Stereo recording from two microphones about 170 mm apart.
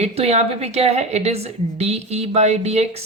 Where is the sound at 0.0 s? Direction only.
35° right (ahead or behind).